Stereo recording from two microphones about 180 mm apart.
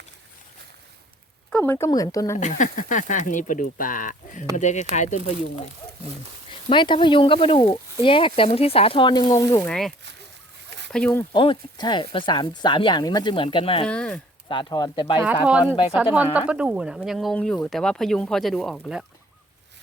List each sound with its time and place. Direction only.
1.5 s speech: 10° left (ahead or behind)
2.4 s speech: 45° left (ahead or behind)
6.5 s speech: 25° left (ahead or behind)
9.6 s speech: 5° left (ahead or behind)
10.0 s a sound: 70° right (ahead or behind)
10.9 s speech: 5° left (ahead or behind)
11.3 s speech: 25° left (ahead or behind)
13.8 s speech: 5° left (ahead or behind)
14.4 s speech: 25° left (ahead or behind)
16.1 s speech: 10° right (ahead or behind)